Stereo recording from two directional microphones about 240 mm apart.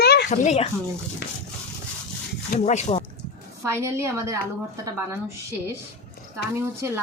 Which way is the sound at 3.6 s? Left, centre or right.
Centre.